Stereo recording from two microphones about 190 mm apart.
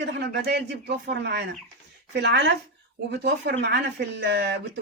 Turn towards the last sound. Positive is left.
turn(degrees=-60)  # may be behind; listen again after turning